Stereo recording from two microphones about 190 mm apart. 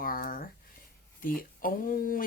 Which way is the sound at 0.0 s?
50° left (ahead or behind).